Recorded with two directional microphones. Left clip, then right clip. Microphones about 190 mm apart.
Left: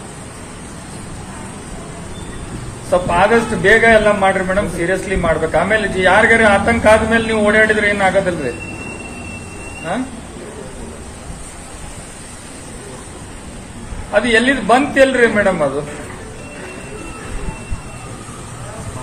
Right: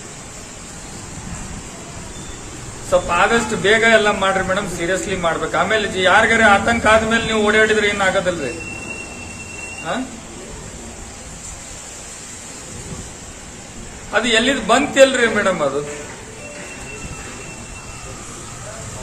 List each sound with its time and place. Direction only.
2.9 s a man's voice: 15° right (ahead or behind)
14.1 s a man's voice: 15° right (ahead or behind)